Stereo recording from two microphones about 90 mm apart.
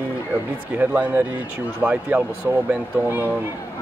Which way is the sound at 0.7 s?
20° right (ahead or behind).